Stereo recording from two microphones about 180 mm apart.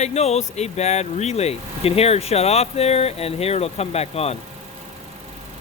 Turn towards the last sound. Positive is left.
turn(degrees=35)  # may be behind; listen again after turning